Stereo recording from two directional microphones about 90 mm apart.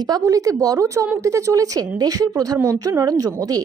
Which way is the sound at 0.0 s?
45° right (ahead or behind).